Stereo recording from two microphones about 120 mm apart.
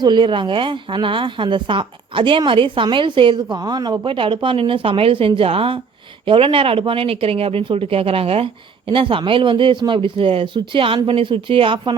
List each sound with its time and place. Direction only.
0.0 s speech: 40° right (ahead or behind)
4.0 s speech: 45° right (ahead or behind)